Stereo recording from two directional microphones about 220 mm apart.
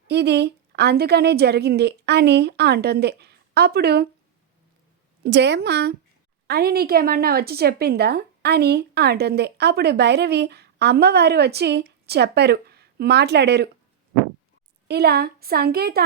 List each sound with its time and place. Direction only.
0.1 s a woman's voice: 50° right (ahead or behind)
5.2 s a woman's voice: 50° right (ahead or behind)
14.8 s a woman's voice: 45° right (ahead or behind)